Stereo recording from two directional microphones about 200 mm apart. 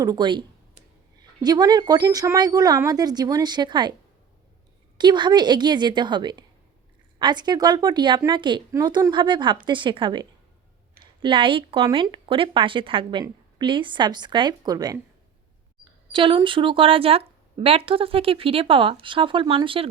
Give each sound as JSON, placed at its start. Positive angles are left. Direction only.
{"t": 0.0, "sound": "a woman's voice", "side_deg": -20}
{"t": 4.9, "sound": "a woman's voice", "side_deg": -20}
{"t": 16.1, "sound": "a woman's voice", "side_deg": -25}